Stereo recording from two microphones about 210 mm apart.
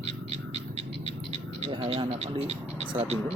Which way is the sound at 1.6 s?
25° right (ahead or behind).